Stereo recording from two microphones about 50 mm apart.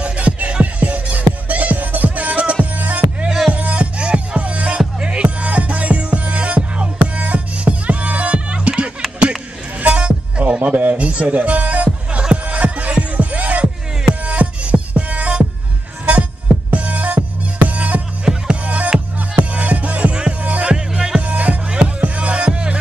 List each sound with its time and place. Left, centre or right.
0.0 s music: right
3.3 s music: centre
3.5 s music: right
10.6 s music: right
16.7 s music: right
18.2 s music: centre
20.7 s music: centre
21.2 s music: right